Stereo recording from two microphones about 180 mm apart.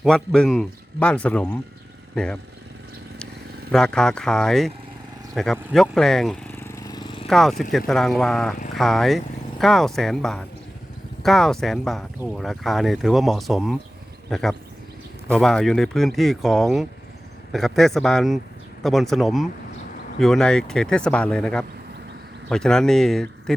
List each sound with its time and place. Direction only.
0.0 s speech: centre (ahead or behind)
3.7 s speech: 5° left (ahead or behind)
5.3 s vehicle: centre (ahead or behind); by 7.3 s 25° left (ahead or behind)
7.3 s speech: centre (ahead or behind)